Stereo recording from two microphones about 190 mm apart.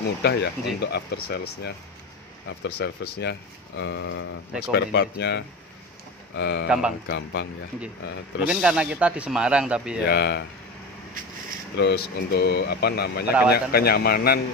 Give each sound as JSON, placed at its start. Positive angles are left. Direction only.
{"t": 0.2, "sound": "speech", "side_deg": 60}
{"t": 4.6, "sound": "speech", "side_deg": 60}
{"t": 8.5, "sound": "speech", "side_deg": -5}
{"t": 10.0, "sound": "speech", "side_deg": 60}
{"t": 11.7, "sound": "speech", "side_deg": 60}